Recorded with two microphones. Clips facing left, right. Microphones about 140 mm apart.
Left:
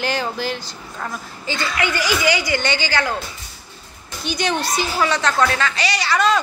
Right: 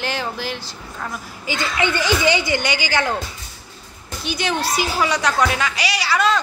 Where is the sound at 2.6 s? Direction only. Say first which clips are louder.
Even; 10° right (ahead or behind).